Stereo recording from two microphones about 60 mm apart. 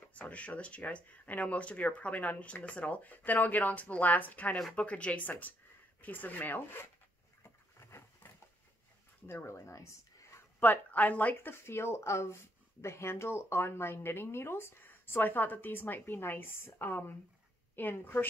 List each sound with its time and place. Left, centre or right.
0.1 s speech: left
9.3 s speech: left
9.7 s a sound: left
10.6 s speech: left
11.5 s speech: left
14.8 s a woman's voice: left
17.7 s a woman's voice: left